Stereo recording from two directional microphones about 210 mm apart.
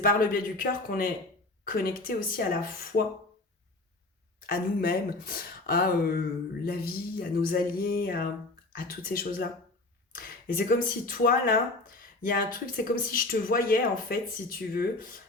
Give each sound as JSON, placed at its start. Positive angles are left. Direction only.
{"t": 0.0, "sound": "speech", "side_deg": 45}
{"t": 4.4, "sound": "speech", "side_deg": 45}
{"t": 10.4, "sound": "speech", "side_deg": 40}